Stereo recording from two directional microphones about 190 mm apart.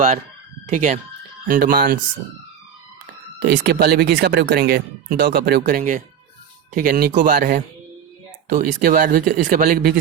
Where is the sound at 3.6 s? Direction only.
55° right (ahead or behind).